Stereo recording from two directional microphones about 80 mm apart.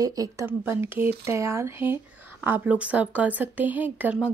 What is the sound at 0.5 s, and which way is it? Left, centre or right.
A woman's voice, right.